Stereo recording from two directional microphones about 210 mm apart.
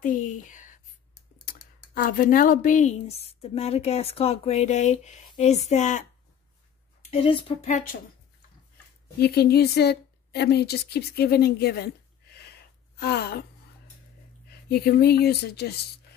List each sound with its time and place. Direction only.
0.0 s a sound: 40° left (ahead or behind)
1.4 s a woman's voice: 40° left (ahead or behind); by 7.7 s 25° left (ahead or behind)
7.7 s a woman's voice: 40° left (ahead or behind)
9.2 s a woman's voice: 50° left (ahead or behind)
14.5 s speech: 50° left (ahead or behind)